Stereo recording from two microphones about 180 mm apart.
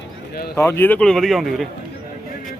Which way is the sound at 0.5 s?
15° left (ahead or behind).